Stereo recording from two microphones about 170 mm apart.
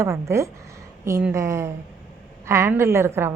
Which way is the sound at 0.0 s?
15° right (ahead or behind).